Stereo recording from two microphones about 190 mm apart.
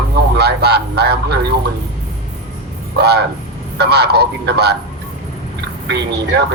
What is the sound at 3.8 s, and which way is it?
Speech, 60° right (ahead or behind).